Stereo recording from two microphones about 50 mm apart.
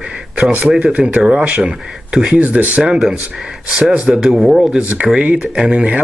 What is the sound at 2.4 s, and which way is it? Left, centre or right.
Speech, right.